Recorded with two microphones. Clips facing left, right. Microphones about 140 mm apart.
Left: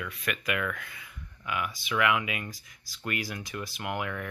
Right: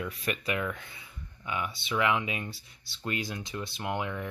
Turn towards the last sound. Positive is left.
turn(degrees=-25)  # may be behind; listen again after turning